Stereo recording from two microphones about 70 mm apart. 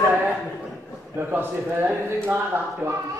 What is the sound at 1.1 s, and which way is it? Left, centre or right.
A man's voice, right.